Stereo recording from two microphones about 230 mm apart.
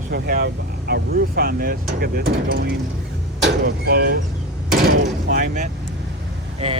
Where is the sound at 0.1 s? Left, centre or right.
Right.